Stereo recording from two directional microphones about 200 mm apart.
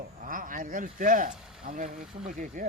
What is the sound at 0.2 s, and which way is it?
Speech, 45° right (ahead or behind).